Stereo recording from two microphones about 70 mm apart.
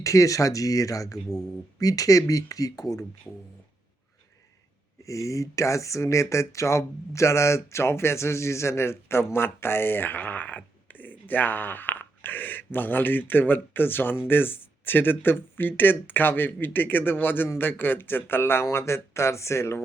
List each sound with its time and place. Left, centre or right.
0.0 s speech: left
5.0 s speech: left